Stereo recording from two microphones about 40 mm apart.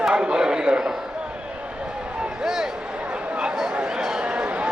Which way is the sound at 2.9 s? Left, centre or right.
Right.